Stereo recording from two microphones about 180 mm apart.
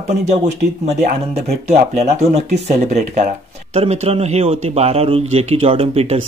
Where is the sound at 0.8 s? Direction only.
35° right (ahead or behind).